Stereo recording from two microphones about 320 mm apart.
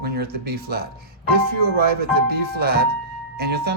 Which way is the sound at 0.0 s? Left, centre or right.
Right.